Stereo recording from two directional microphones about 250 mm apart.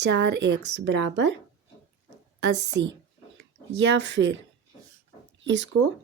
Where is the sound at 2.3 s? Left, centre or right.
Right.